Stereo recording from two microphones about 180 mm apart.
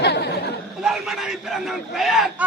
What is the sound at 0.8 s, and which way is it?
A man's voice, centre (ahead or behind).